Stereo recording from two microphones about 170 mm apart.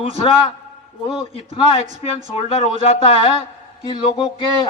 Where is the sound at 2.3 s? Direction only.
35° left (ahead or behind).